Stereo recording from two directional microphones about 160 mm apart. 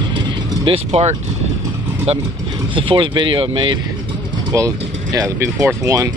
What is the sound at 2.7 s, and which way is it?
Speech, 30° right (ahead or behind).